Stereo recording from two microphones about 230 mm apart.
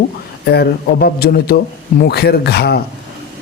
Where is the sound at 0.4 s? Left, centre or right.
Left.